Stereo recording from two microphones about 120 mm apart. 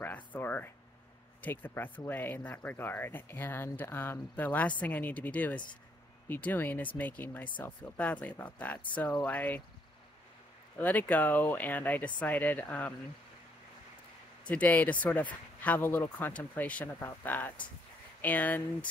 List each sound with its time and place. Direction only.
0.0 s a sound: 15° left (ahead or behind)
1.4 s speech: 15° left (ahead or behind)
10.8 s speech: 15° left (ahead or behind)
14.5 s speech: 15° left (ahead or behind)